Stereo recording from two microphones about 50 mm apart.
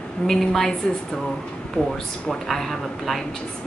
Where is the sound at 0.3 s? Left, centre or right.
Centre.